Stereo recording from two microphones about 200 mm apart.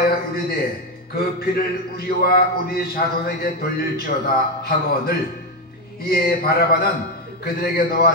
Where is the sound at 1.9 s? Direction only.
50° left (ahead or behind).